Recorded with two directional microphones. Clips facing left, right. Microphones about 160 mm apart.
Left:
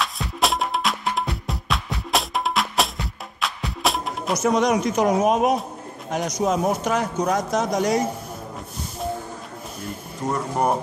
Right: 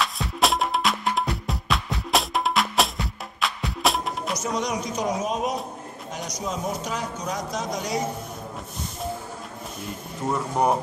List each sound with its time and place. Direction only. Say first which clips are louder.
0.0 s music: even; centre (ahead or behind)
4.4 s speech: left 12 dB; 60° left (ahead or behind)
10.2 s speech: even; centre (ahead or behind)